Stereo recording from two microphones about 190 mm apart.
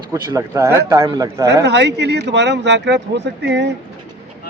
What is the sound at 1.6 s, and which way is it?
Speech, 65° right (ahead or behind).